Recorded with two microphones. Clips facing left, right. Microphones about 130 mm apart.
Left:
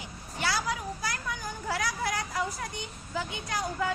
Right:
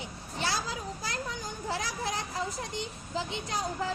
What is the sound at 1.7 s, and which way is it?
A woman's voice, 25° right (ahead or behind).